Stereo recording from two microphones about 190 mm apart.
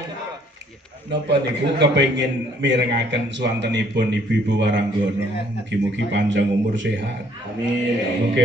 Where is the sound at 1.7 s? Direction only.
70° right (ahead or behind).